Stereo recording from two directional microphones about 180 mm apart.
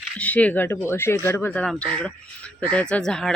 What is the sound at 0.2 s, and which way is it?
Speech, 10° left (ahead or behind).